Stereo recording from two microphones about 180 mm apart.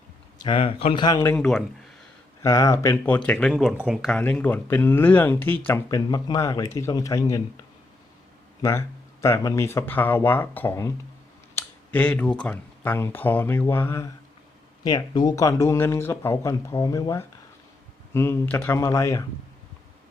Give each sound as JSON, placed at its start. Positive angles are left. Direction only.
{"t": 0.4, "sound": "speech", "side_deg": 30}
{"t": 1.4, "sound": "speech", "side_deg": 0}
{"t": 2.4, "sound": "speech", "side_deg": 15}
{"t": 4.2, "sound": "speech", "side_deg": 10}
{"t": 8.6, "sound": "speech", "side_deg": 20}